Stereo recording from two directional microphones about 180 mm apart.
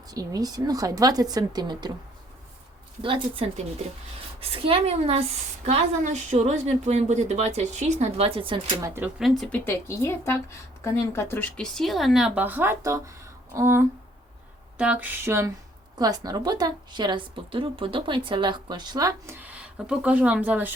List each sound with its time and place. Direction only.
0.1 s a woman's voice: 20° right (ahead or behind)
3.0 s a woman's voice: 30° right (ahead or behind)
8.8 s speech: 15° right (ahead or behind)
9.4 s a woman's voice: 10° left (ahead or behind); by 20.7 s 10° right (ahead or behind)